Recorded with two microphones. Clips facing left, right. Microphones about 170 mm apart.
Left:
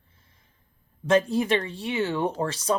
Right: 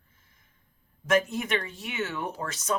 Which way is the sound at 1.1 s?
30° left (ahead or behind).